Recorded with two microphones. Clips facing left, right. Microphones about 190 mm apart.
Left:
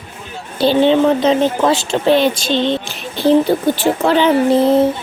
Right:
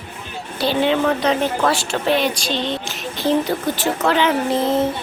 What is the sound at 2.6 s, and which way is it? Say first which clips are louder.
Speech: left 6 dB; 30° left (ahead or behind).